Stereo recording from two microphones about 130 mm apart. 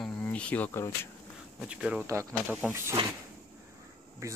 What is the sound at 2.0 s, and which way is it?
Speech, 25° right (ahead or behind).